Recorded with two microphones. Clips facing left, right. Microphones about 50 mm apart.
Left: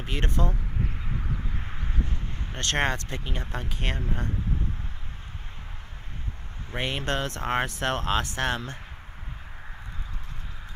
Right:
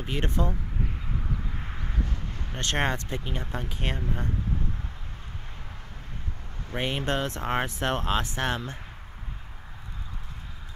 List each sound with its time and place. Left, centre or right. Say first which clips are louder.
0.0 s speech: right 1 dB; left
1.8 s a sound: even; left
2.5 s speech: left 1 dB; left
6.8 s speech: right 1 dB; left